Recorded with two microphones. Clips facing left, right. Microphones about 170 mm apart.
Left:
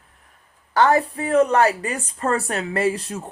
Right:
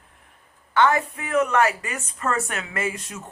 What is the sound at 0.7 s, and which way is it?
A woman's voice, 35° left (ahead or behind).